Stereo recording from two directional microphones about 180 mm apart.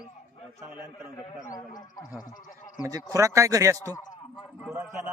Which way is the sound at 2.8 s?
20° right (ahead or behind).